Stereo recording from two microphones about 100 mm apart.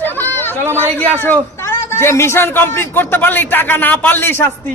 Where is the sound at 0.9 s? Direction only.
20° left (ahead or behind).